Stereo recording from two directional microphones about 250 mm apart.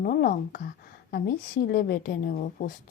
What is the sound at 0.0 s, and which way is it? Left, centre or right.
A woman's voice, left.